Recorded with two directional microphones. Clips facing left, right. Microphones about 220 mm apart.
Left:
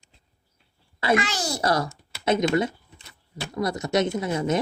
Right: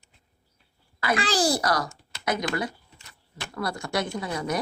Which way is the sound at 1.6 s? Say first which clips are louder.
Left 3 dB; 25° left (ahead or behind).